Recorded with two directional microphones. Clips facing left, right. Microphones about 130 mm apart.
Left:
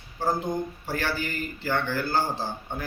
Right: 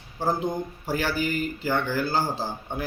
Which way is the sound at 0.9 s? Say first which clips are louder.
Right 5 dB; 15° right (ahead or behind).